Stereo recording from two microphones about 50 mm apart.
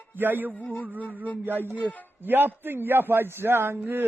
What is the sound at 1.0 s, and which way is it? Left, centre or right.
Speech, left.